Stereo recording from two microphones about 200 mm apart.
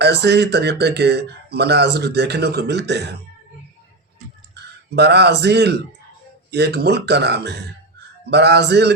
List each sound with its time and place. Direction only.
0.0 s speech: 55° right (ahead or behind)
4.5 s speech: 55° right (ahead or behind)